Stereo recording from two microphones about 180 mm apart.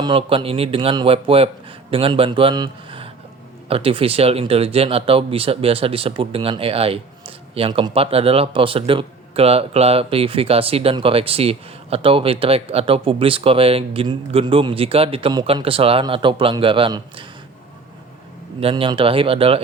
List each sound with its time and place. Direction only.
0.0 s speech: 30° right (ahead or behind)
18.6 s speech: 30° right (ahead or behind)